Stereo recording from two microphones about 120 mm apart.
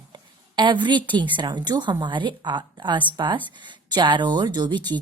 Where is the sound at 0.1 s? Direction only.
40° right (ahead or behind).